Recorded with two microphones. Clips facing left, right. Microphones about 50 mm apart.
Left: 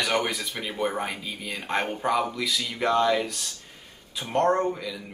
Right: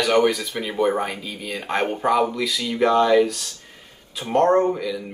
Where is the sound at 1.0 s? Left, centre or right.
Centre.